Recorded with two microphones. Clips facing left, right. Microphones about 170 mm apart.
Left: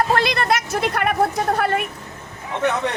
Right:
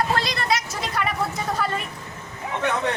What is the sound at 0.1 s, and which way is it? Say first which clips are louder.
Speech: left 4 dB; 60° left (ahead or behind).